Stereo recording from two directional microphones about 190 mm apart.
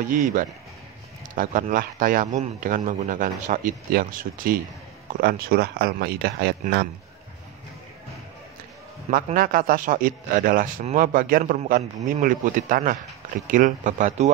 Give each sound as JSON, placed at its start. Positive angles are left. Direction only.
{"t": 0.0, "sound": "speech", "side_deg": -45}
{"t": 9.1, "sound": "speech", "side_deg": -45}